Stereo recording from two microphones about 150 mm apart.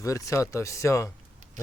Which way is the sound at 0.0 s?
20° left (ahead or behind).